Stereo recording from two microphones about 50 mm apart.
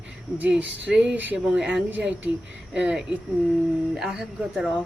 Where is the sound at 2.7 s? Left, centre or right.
Centre.